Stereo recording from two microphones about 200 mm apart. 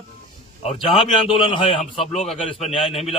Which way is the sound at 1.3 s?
25° left (ahead or behind).